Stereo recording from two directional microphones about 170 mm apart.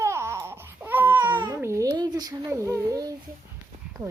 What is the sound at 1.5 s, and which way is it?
A child's voice, 15° right (ahead or behind).